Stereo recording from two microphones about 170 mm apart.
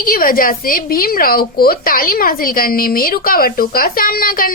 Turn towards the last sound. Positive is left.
turn(degrees=55)  # may be behind; listen again after turning